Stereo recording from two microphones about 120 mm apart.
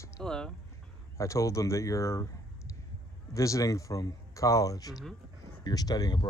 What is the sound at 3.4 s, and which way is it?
Speech, 25° left (ahead or behind).